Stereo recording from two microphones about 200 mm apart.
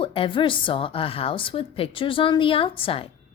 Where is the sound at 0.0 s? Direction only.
25° left (ahead or behind).